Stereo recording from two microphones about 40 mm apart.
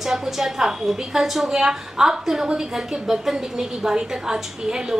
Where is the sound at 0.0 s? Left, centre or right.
Centre.